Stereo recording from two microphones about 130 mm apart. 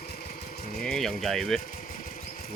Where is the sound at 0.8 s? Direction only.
5° left (ahead or behind).